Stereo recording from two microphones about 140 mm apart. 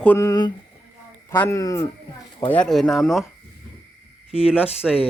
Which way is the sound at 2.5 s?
5° left (ahead or behind).